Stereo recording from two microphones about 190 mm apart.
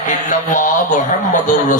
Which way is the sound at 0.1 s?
40° left (ahead or behind).